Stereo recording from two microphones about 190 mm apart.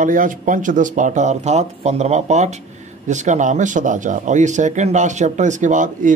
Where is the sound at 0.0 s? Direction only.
45° right (ahead or behind).